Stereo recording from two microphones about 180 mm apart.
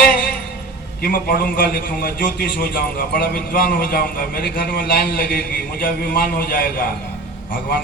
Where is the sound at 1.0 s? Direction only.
55° left (ahead or behind).